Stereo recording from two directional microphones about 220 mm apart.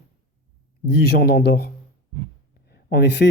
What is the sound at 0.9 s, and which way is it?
Speech, 50° left (ahead or behind).